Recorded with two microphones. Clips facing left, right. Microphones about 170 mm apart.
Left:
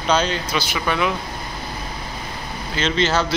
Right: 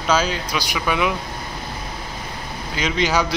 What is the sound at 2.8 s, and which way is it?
Speech, 10° right (ahead or behind).